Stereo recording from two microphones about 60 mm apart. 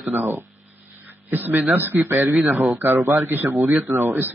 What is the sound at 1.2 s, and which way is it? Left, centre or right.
Speech, right.